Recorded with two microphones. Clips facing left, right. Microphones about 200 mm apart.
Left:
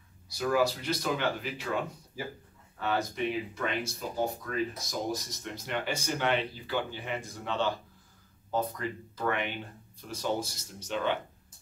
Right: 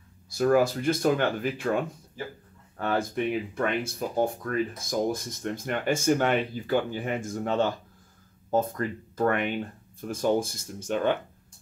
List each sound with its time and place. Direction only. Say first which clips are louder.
0.3 s speech: right 6 dB; 50° right (ahead or behind)
2.8 s speech: right 4 dB; 50° right (ahead or behind)